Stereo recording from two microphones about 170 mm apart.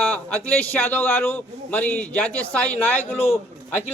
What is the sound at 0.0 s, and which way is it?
A man's voice, 10° left (ahead or behind).